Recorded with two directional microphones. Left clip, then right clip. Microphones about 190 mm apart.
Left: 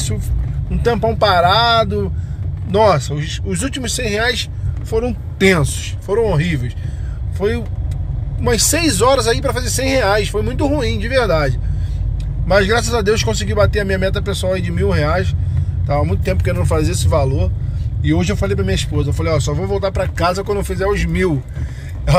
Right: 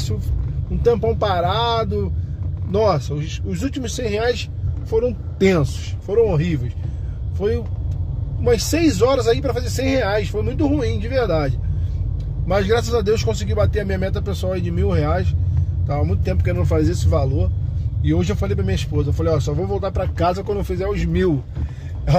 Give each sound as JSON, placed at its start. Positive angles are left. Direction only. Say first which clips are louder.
{"t": 0.8, "sound": "a man's voice", "louder": "left 3 dB", "side_deg": -5}